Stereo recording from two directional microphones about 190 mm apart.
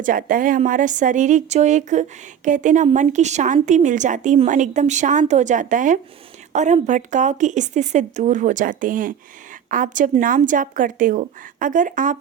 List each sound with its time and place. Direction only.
0.0 s a woman's voice: 45° right (ahead or behind)